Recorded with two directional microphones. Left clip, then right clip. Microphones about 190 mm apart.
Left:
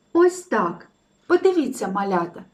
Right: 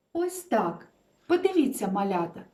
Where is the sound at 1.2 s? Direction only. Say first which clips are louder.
Left 5 dB; 20° right (ahead or behind).